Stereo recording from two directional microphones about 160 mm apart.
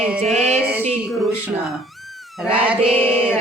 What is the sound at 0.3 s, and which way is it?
Music, 45° right (ahead or behind).